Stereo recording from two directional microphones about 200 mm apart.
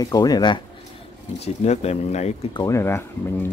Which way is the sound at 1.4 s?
30° left (ahead or behind).